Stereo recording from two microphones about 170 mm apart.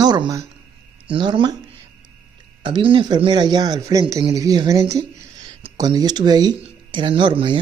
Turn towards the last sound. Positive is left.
turn(degrees=-30)  # may be behind; listen again after turning